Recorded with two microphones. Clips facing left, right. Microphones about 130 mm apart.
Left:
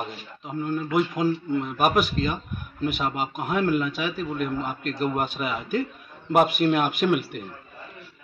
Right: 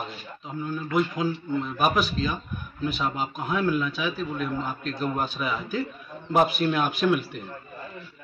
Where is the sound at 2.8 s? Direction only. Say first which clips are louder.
Left 1 dB; 55° left (ahead or behind).